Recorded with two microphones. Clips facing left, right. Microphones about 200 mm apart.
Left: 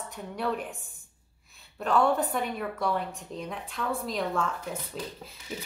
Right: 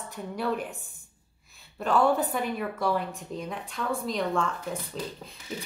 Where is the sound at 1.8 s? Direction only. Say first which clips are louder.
Right 1 dB; centre (ahead or behind).